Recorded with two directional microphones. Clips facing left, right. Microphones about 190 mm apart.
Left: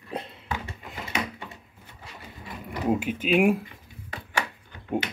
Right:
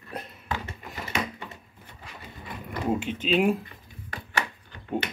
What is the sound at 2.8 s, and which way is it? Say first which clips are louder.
Speech: left 2 dB; 10° left (ahead or behind).